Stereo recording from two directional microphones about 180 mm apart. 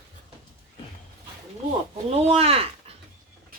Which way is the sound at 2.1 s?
35° right (ahead or behind).